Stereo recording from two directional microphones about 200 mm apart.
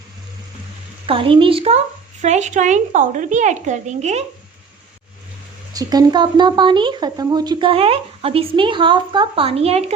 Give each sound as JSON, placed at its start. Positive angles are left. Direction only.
{"t": 1.0, "sound": "a woman's voice", "side_deg": -25}
{"t": 5.7, "sound": "a woman's voice", "side_deg": -20}